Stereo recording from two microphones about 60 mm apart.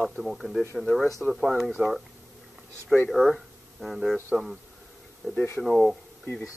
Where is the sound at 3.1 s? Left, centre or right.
Centre.